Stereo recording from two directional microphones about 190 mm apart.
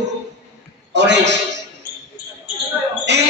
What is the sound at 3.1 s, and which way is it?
Speech, 65° right (ahead or behind).